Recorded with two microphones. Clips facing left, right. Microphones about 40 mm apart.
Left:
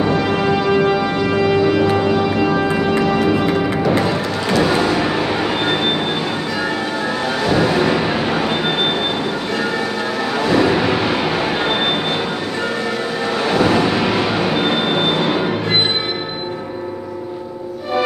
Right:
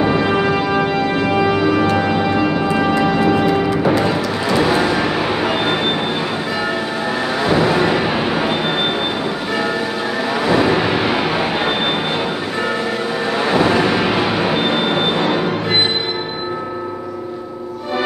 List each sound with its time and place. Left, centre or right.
0.1 s music: centre
7.4 s music: centre
10.4 s a sound: centre
13.4 s train: centre